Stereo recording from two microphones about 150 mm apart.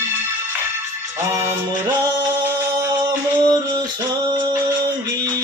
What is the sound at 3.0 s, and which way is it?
Music, 30° right (ahead or behind).